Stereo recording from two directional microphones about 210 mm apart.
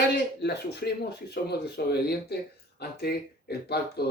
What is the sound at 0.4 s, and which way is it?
Speech, 50° left (ahead or behind).